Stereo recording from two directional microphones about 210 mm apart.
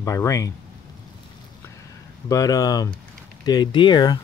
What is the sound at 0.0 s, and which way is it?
Speech, 15° left (ahead or behind).